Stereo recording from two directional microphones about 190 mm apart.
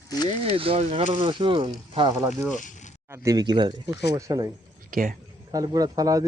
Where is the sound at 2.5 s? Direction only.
40° left (ahead or behind).